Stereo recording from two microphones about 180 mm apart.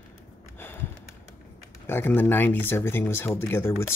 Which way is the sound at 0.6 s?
10° left (ahead or behind).